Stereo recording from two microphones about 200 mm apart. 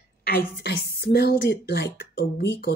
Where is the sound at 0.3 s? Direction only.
50° left (ahead or behind).